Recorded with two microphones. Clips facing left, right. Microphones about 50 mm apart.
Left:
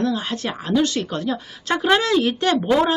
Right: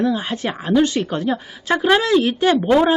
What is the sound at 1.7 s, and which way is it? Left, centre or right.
Speech, centre.